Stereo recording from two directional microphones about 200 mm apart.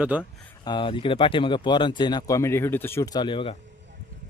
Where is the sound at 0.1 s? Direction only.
5° right (ahead or behind).